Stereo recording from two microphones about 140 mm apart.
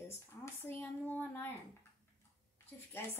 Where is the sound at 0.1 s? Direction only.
15° left (ahead or behind).